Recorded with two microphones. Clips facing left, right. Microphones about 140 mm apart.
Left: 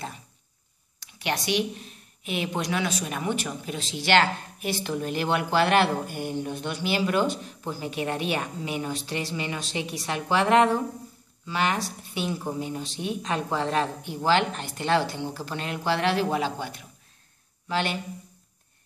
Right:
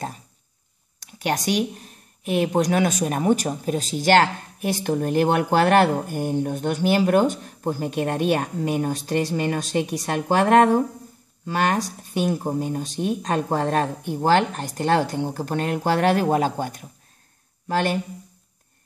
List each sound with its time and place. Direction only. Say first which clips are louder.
0.9 s speech: right 5 dB; 45° right (ahead or behind)